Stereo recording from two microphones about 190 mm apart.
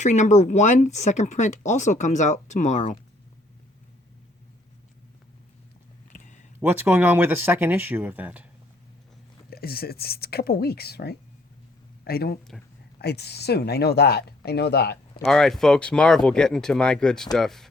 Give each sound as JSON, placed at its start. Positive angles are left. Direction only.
{"t": 0.0, "sound": "speech", "side_deg": 40}
{"t": 6.1, "sound": "a sound", "side_deg": 40}
{"t": 6.6, "sound": "speech", "side_deg": -10}
{"t": 9.5, "sound": "speech", "side_deg": 55}
{"t": 15.3, "sound": "speech", "side_deg": 0}